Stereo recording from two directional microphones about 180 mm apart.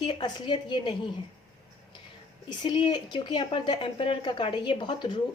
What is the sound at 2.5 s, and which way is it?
Speech, 25° left (ahead or behind).